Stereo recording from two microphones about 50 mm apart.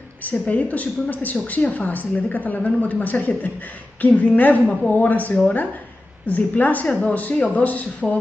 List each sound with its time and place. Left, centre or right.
0.2 s a woman's voice: left